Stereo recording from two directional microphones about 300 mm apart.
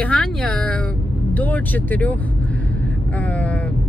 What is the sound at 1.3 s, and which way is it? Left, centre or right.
Vehicle, centre.